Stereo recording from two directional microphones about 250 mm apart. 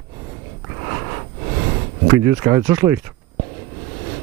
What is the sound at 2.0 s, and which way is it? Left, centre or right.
Speech, centre.